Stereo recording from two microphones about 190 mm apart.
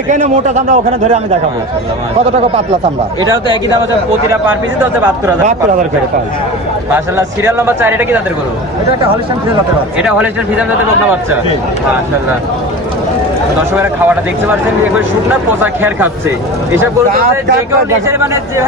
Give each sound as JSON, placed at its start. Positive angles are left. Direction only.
{"t": 0.1, "sound": "a man's voice", "side_deg": -40}
{"t": 4.3, "sound": "speech", "side_deg": -15}
{"t": 6.9, "sound": "speech", "side_deg": -10}
{"t": 10.0, "sound": "speech", "side_deg": -5}
{"t": 14.9, "sound": "speech", "side_deg": -10}
{"t": 18.0, "sound": "speech", "side_deg": -15}